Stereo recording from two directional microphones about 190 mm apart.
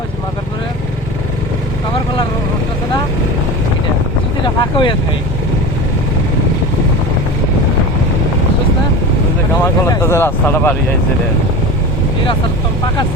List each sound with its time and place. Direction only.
4.4 s speech: 25° left (ahead or behind)
9.8 s speech: 15° left (ahead or behind)